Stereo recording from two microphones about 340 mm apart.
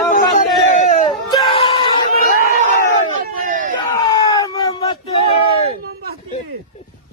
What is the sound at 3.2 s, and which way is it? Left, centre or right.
Crowd, right.